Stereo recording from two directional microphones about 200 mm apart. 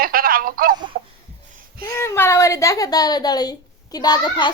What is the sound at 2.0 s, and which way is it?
Speech, 15° left (ahead or behind).